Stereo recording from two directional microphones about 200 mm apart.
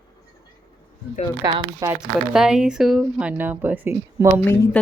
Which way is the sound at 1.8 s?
5° right (ahead or behind).